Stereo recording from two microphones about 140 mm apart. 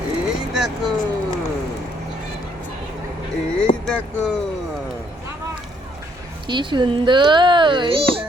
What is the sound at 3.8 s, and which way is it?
Speech, 5° left (ahead or behind).